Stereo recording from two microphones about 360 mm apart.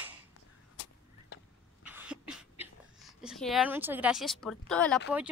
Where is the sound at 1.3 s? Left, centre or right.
Left.